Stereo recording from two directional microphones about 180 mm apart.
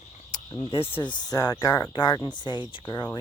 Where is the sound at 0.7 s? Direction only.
30° left (ahead or behind).